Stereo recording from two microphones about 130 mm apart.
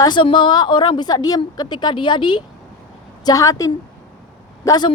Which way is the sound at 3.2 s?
25° left (ahead or behind).